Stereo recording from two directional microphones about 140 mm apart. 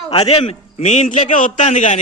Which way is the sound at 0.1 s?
45° left (ahead or behind).